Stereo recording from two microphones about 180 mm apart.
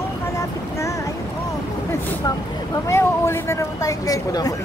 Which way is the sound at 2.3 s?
25° left (ahead or behind).